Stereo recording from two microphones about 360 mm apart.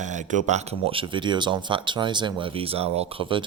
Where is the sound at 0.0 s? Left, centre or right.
Centre.